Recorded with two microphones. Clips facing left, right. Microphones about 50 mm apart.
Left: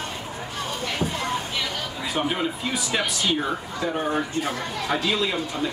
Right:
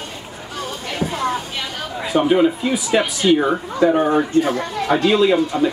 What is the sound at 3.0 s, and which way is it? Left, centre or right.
Speech, right.